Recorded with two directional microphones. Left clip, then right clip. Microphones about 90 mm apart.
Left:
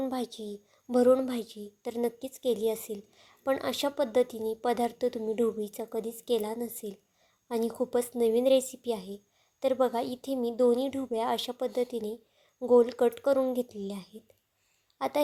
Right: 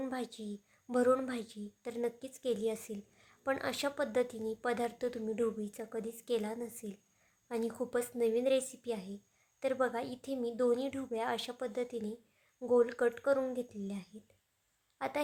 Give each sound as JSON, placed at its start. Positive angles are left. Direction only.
{"t": 0.0, "sound": "a woman's voice", "side_deg": 20}